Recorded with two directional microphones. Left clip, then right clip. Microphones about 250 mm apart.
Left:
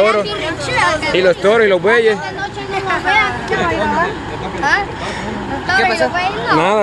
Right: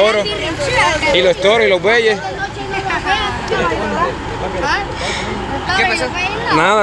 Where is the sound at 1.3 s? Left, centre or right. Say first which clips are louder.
Left 3 dB; centre.